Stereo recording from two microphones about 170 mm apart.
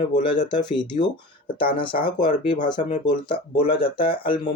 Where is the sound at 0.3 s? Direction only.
25° left (ahead or behind).